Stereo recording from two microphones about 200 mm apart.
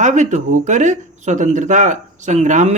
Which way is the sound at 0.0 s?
35° right (ahead or behind).